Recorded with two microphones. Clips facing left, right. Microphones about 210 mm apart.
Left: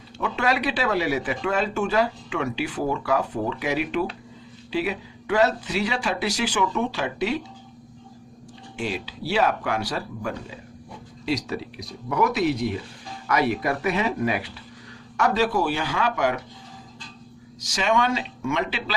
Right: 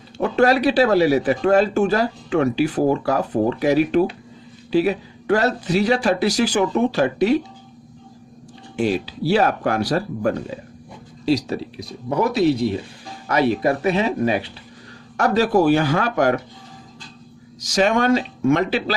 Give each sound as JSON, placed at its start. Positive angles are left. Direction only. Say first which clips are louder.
{"t": 0.2, "sound": "speech", "louder": "right 8 dB", "side_deg": -40}
{"t": 8.7, "sound": "speech", "louder": "right 9 dB", "side_deg": -40}
{"t": 15.2, "sound": "speech", "louder": "right 5 dB", "side_deg": -45}
{"t": 17.7, "sound": "speech", "louder": "right 6 dB", "side_deg": -40}